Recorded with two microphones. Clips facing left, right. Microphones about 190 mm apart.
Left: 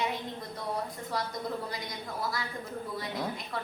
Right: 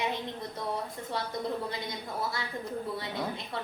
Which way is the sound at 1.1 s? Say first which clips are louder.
Left 1 dB; 25° right (ahead or behind).